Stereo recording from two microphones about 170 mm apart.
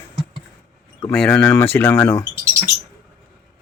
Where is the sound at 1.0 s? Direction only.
5° left (ahead or behind).